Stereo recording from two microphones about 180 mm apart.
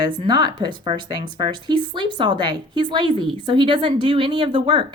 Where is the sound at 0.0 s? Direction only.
25° right (ahead or behind).